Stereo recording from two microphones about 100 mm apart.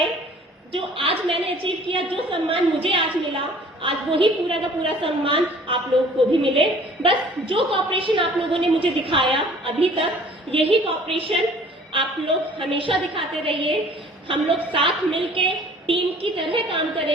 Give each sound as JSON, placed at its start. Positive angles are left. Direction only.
{"t": 0.7, "sound": "a woman's voice", "side_deg": -65}